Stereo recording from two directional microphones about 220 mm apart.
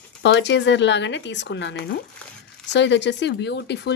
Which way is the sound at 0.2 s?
55° left (ahead or behind).